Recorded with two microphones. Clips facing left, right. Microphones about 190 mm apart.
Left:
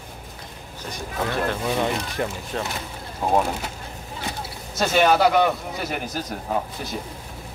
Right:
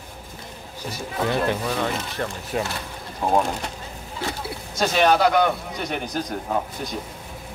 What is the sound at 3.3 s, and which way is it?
Speech, 5° left (ahead or behind).